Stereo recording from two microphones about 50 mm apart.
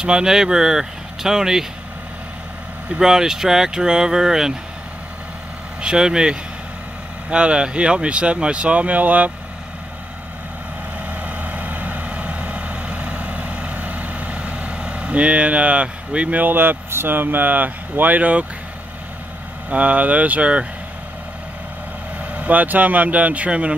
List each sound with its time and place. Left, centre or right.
0.0 s speech: centre
2.9 s speech: centre
5.8 s speech: centre
11.1 s vehicle: right
19.7 s speech: right
22.2 s speech: right